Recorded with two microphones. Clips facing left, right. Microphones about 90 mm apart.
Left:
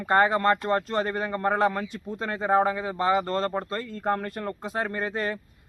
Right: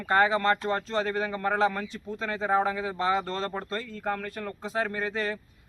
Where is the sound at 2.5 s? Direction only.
45° left (ahead or behind).